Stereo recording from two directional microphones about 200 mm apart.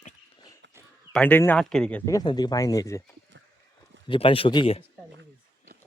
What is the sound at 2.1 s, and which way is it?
Speech, 20° left (ahead or behind).